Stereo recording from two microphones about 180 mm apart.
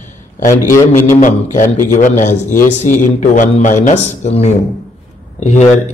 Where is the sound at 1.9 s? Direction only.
45° left (ahead or behind).